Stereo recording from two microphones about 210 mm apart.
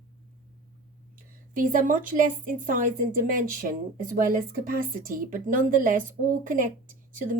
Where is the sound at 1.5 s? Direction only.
40° right (ahead or behind).